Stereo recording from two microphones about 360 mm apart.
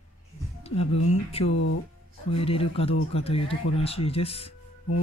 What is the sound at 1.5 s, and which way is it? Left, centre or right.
Speech, left.